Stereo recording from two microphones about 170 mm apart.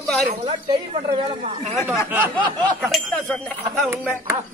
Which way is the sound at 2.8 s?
Centre (ahead or behind).